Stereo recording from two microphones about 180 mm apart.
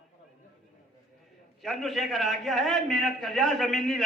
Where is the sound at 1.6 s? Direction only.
Centre (ahead or behind).